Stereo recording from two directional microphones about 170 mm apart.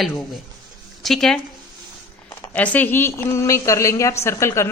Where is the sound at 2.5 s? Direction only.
10° left (ahead or behind).